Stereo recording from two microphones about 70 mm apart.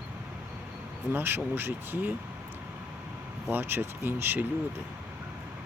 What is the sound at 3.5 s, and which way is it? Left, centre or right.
Speech, right.